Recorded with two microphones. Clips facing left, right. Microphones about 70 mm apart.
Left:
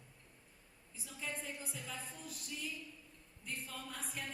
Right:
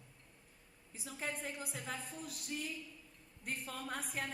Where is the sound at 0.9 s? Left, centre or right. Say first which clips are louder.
Right 3 dB; right.